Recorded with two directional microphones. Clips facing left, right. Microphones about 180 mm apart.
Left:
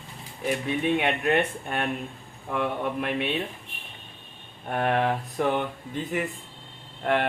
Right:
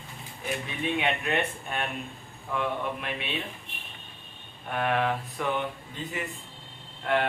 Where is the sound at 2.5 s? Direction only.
50° left (ahead or behind).